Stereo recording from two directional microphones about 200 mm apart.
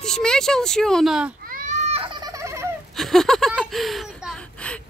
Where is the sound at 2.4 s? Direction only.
15° right (ahead or behind).